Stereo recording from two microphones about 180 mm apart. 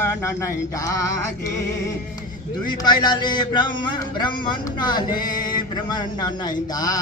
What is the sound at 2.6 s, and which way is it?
Speech, 25° left (ahead or behind).